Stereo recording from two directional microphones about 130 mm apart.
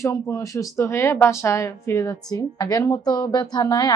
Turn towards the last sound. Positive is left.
turn(degrees=30)  # may be behind; listen again after turning